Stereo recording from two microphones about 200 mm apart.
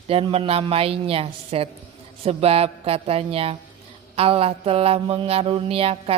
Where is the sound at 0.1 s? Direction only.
30° right (ahead or behind).